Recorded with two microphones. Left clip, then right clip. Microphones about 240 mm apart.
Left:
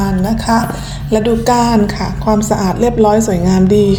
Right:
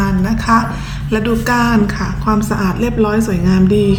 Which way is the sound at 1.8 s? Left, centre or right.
Right.